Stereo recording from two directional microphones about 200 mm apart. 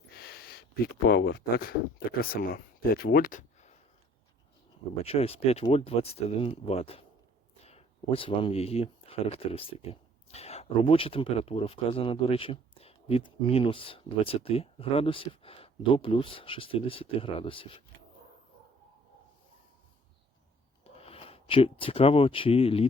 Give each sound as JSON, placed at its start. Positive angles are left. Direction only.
{"t": 0.1, "sound": "speech", "side_deg": 50}
{"t": 5.0, "sound": "speech", "side_deg": 30}
{"t": 20.8, "sound": "speech", "side_deg": 30}